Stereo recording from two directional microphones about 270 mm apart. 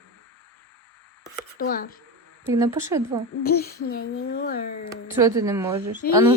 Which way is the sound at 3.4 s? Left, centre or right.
Left.